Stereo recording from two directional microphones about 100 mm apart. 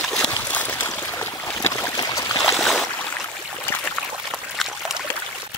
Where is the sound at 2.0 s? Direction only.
40° left (ahead or behind).